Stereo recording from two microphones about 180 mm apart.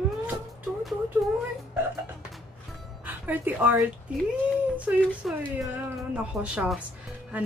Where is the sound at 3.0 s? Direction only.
10° right (ahead or behind).